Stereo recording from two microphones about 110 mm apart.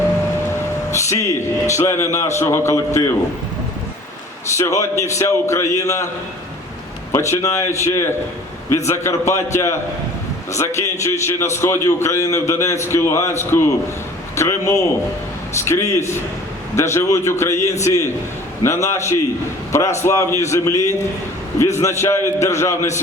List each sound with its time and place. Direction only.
0.9 s a man's voice: 25° left (ahead or behind)
4.5 s a man's voice: 25° left (ahead or behind)
7.1 s a man's voice: 25° left (ahead or behind)